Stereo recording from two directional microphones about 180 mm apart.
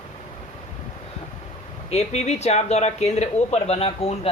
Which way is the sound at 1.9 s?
35° left (ahead or behind).